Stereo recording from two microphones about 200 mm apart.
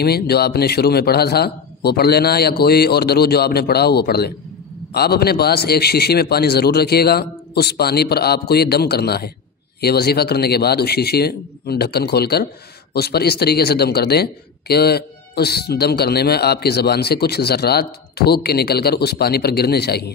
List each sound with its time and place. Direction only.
0.0 s speech: 50° left (ahead or behind)